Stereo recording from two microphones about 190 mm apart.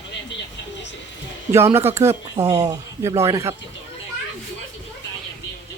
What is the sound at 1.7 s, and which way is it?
Speech, 15° right (ahead or behind).